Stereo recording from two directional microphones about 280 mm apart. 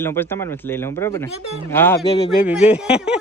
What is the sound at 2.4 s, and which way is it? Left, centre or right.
Speech, centre.